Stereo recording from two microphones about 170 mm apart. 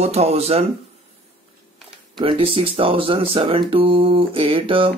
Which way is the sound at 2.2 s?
35° right (ahead or behind).